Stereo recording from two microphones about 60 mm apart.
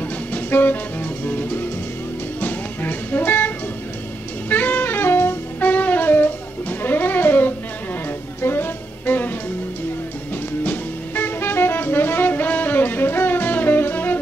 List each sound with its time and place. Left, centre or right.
0.3 s music: left
4.5 s saxophone: left
5.6 s music: left
10.6 s music: left